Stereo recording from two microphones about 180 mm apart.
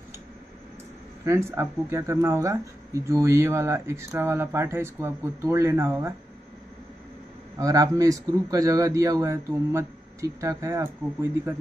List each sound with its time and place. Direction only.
1.2 s speech: 15° right (ahead or behind)
7.5 s a man's voice: 20° right (ahead or behind)